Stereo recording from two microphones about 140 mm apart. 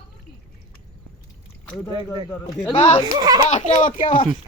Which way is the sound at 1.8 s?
20° left (ahead or behind).